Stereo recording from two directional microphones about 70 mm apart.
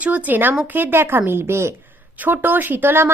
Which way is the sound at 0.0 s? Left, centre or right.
Right.